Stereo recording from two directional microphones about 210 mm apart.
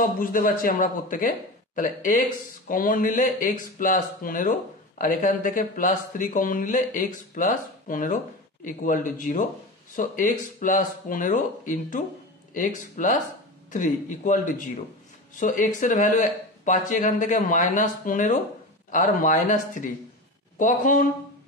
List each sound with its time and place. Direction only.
0.0 s speech: 40° left (ahead or behind)